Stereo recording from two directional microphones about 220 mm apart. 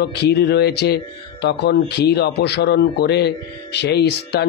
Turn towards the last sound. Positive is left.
turn(degrees=50)  # may be behind; listen again after turning